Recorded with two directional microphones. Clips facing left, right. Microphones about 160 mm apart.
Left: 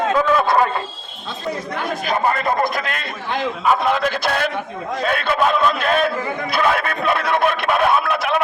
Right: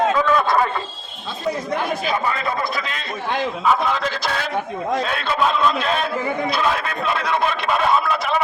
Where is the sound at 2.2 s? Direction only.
50° left (ahead or behind).